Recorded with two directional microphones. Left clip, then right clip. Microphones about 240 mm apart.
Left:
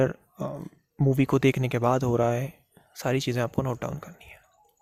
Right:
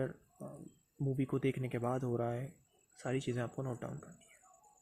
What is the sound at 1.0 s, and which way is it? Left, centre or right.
Speech, left.